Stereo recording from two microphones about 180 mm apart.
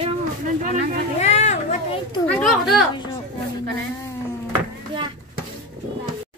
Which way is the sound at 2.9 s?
25° left (ahead or behind).